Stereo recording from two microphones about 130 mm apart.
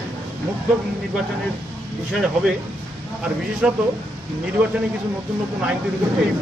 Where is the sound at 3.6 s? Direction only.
5° right (ahead or behind).